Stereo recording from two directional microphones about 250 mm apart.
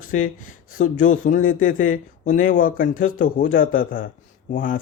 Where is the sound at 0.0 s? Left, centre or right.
Left.